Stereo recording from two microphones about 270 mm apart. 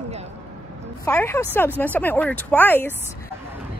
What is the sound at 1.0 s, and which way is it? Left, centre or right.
Speech, centre.